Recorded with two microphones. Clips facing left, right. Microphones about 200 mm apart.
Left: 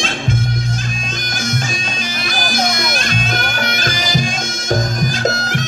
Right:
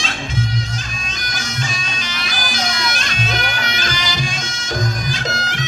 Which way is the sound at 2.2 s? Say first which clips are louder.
Left 6 dB; 50° left (ahead or behind).